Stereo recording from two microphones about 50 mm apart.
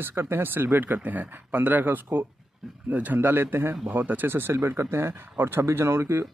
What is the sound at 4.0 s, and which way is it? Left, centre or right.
Speech, right.